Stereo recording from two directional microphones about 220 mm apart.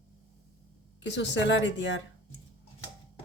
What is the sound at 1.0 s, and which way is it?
Speech, 55° left (ahead or behind).